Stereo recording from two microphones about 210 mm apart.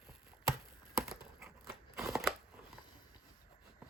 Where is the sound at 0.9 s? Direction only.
Centre (ahead or behind).